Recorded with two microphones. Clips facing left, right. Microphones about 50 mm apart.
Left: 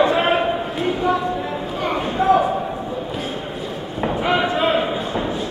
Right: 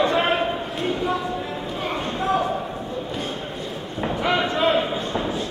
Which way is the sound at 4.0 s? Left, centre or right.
Centre.